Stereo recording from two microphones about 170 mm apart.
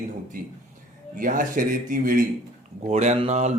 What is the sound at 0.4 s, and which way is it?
Speech, 50° right (ahead or behind).